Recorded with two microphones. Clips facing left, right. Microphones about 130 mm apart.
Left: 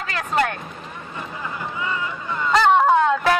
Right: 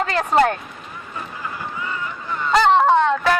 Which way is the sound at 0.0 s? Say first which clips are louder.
Right 6 dB; 35° right (ahead or behind).